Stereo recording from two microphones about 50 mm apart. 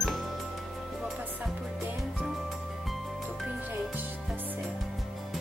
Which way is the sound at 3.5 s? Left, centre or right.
Right.